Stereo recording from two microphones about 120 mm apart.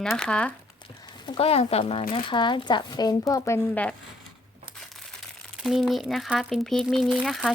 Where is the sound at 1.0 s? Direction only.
40° left (ahead or behind).